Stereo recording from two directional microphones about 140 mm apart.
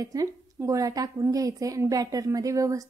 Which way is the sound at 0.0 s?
25° right (ahead or behind).